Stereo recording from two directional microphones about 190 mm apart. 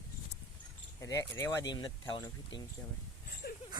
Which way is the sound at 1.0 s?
15° left (ahead or behind).